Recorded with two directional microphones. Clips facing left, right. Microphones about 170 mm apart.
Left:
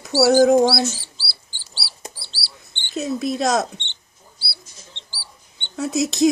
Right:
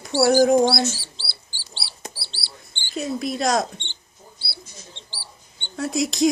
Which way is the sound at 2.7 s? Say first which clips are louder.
Left 2 dB; 20° left (ahead or behind).